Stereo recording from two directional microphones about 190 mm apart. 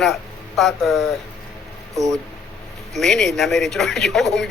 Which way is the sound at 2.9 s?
Centre (ahead or behind).